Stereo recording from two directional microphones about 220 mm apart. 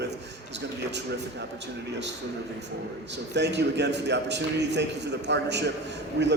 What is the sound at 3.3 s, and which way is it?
A man's voice, 50° right (ahead or behind).